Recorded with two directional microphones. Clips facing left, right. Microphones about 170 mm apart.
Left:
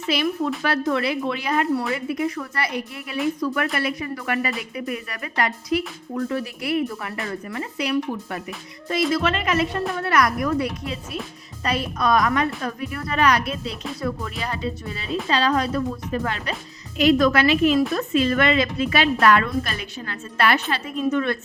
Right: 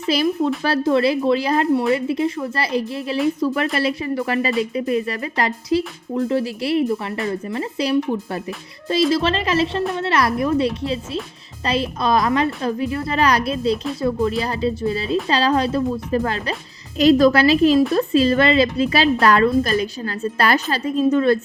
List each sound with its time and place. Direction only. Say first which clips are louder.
0.1 s a woman's voice: right 4 dB; 35° right (ahead or behind)